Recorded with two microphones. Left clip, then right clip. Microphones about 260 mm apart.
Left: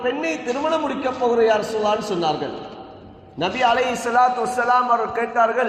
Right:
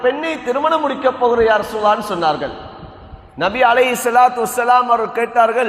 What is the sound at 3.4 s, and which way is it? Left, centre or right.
A man's voice, right.